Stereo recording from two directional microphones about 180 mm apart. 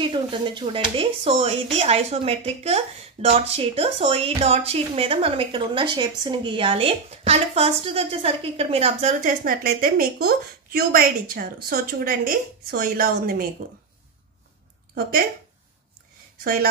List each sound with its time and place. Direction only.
0.0 s speech: 25° right (ahead or behind); by 13.5 s 55° right (ahead or behind)
15.0 s speech: 55° right (ahead or behind)